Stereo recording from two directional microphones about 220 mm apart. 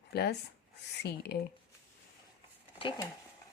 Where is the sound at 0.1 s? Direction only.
50° left (ahead or behind).